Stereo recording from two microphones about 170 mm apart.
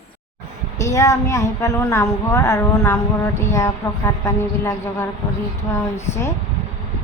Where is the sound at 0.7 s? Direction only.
20° left (ahead or behind).